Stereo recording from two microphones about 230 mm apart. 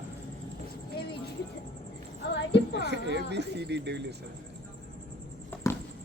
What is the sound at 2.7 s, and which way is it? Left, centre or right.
Speech, right.